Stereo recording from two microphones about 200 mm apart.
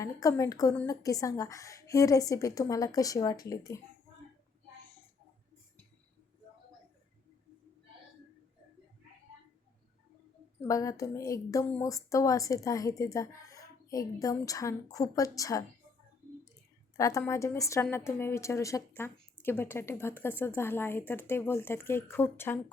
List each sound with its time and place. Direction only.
0.0 s a woman's voice: 15° left (ahead or behind)
10.6 s a woman's voice: 15° left (ahead or behind)
17.0 s a woman's voice: 15° left (ahead or behind)